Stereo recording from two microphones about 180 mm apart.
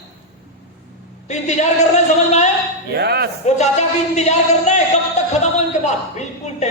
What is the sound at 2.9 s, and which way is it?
Speech, 65° right (ahead or behind).